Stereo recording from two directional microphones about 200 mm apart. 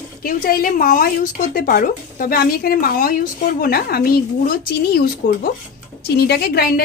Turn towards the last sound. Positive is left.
turn(degrees=50)  # may be behind; listen again after turning